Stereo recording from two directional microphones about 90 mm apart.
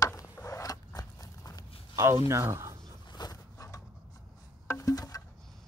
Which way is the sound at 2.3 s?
30° right (ahead or behind).